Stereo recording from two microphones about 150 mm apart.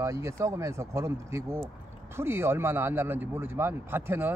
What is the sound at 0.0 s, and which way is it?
Speech, 20° right (ahead or behind).